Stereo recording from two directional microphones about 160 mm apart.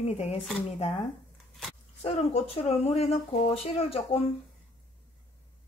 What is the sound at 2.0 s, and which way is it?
Speech, 40° left (ahead or behind).